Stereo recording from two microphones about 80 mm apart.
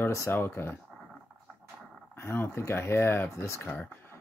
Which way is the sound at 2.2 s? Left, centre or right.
Left.